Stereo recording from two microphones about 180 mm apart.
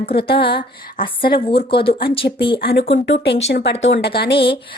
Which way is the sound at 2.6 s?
60° left (ahead or behind).